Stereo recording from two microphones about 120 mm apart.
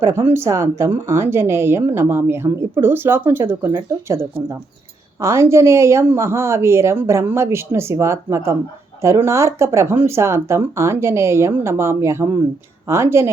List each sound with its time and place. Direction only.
0.0 s speech: 20° right (ahead or behind)
5.2 s speech: 25° right (ahead or behind)